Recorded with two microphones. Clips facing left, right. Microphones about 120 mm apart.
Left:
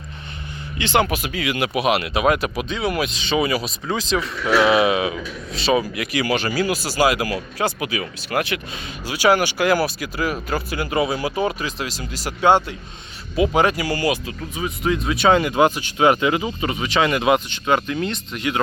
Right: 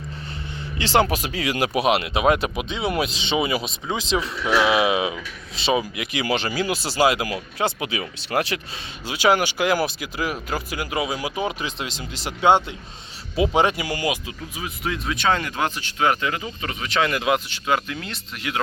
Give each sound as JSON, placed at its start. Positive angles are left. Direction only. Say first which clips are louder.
{"t": 0.8, "sound": "speech", "louder": "even", "side_deg": -35}
{"t": 4.4, "sound": "speech", "louder": "left 4 dB", "side_deg": -5}
{"t": 9.0, "sound": "speech", "louder": "left 2 dB", "side_deg": -20}
{"t": 11.6, "sound": "speech", "louder": "left 2 dB", "side_deg": -25}
{"t": 14.5, "sound": "speech", "louder": "left 7 dB", "side_deg": 0}